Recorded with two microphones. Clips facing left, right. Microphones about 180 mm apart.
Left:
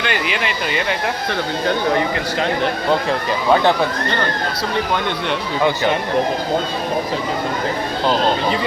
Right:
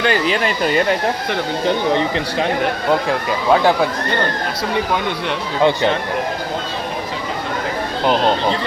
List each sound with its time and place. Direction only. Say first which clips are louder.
0.0 s speech: right 5 dB; 35° right (ahead or behind)
1.3 s speech: even; 20° right (ahead or behind)
3.1 s speech: right 1 dB; 5° right (ahead or behind)